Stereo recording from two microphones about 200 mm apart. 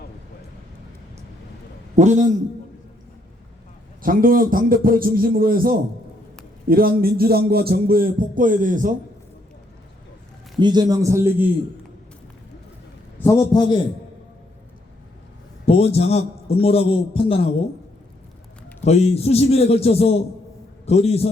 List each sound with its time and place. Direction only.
2.0 s a man's voice: 35° right (ahead or behind)
4.0 s speech: 45° right (ahead or behind)
10.6 s a man's voice: 20° right (ahead or behind)
13.1 s a man's voice: 15° left (ahead or behind)
15.6 s a man's voice: 30° left (ahead or behind)
18.9 s a man's voice: 35° left (ahead or behind)